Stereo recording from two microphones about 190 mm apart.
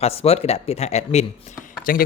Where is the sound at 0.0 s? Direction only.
30° left (ahead or behind).